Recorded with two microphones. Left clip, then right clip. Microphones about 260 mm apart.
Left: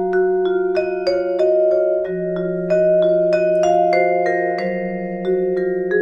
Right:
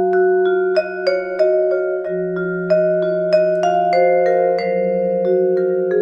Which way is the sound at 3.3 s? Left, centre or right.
Right.